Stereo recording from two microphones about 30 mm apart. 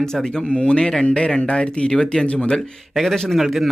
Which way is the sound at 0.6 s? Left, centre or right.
Left.